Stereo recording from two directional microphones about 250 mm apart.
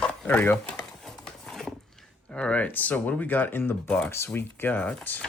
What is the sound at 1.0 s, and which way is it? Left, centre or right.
Speech, centre.